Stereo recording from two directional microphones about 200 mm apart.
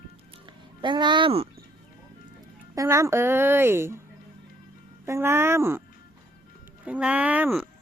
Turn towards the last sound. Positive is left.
turn(degrees=-10)  # may be behind; listen again after turning